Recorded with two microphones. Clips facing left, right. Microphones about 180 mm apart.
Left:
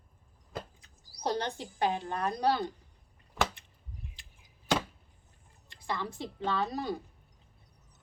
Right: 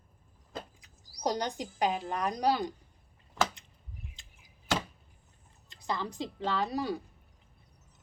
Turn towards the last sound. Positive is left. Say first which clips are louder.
# right 1 dB
turn(degrees=-10)  # may be behind; listen again after turning